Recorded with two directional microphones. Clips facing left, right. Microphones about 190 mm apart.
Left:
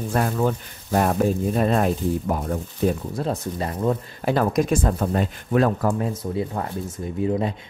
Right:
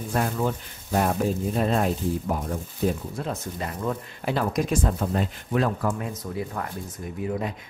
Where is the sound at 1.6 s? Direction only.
55° left (ahead or behind).